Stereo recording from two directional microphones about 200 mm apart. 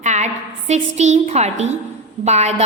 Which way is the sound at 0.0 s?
35° right (ahead or behind).